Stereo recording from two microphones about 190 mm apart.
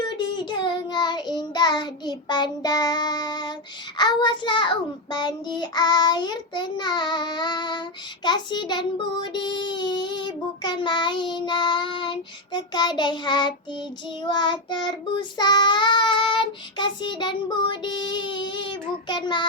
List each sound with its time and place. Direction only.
0.2 s child singing: 25° left (ahead or behind)